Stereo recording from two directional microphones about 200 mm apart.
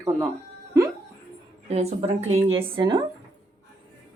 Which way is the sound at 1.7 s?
30° right (ahead or behind).